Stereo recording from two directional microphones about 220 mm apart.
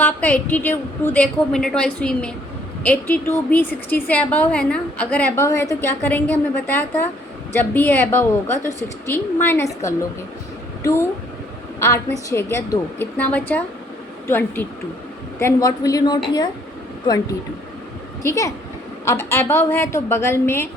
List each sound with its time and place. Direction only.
0.0 s a woman's voice: 5° left (ahead or behind)
11.8 s a woman's voice: 15° left (ahead or behind)
18.2 s a woman's voice: 15° left (ahead or behind)